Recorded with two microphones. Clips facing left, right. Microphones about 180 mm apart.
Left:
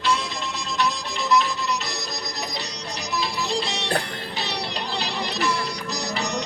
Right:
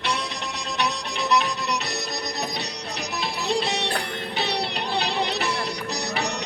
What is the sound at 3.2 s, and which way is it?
Music, 60° right (ahead or behind).